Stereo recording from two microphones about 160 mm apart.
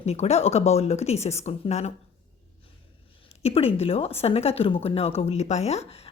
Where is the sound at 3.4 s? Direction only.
40° left (ahead or behind).